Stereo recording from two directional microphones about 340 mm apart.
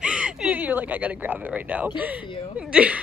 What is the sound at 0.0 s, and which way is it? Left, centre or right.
Speech, centre.